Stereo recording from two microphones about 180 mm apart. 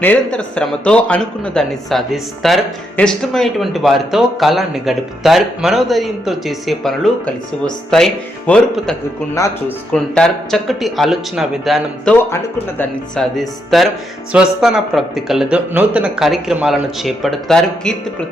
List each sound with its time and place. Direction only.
0.0 s speech: 10° left (ahead or behind)
9.3 s speech: 15° left (ahead or behind)
9.9 s speech: 5° left (ahead or behind)
12.3 s speech: 10° left (ahead or behind)